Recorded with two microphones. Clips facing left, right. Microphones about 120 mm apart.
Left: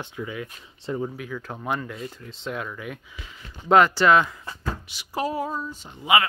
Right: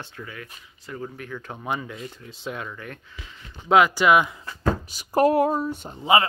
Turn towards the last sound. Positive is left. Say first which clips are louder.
# right 2 dB
turn(degrees=-30)  # may be behind; listen again after turning